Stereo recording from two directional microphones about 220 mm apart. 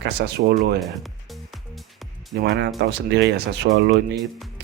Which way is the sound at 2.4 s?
45° right (ahead or behind).